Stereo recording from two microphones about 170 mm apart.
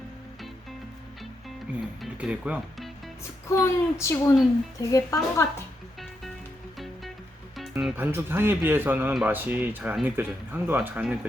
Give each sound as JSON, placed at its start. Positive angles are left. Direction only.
{"t": 2.0, "sound": "speech", "side_deg": -5}
{"t": 3.5, "sound": "a child's voice", "side_deg": 15}
{"t": 6.7, "sound": "music", "side_deg": 0}
{"t": 7.8, "sound": "speech", "side_deg": -5}